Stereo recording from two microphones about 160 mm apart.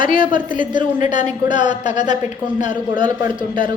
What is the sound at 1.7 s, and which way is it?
A woman's voice, 30° right (ahead or behind).